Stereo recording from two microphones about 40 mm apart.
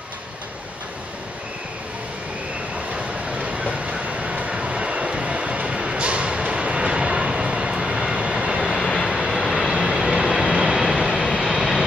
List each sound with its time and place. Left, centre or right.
3.4 s vehicle: right
4.4 s train: right
8.2 s vehicle: right
8.8 s vehicle: centre
9.7 s train: centre
10.8 s vehicle: centre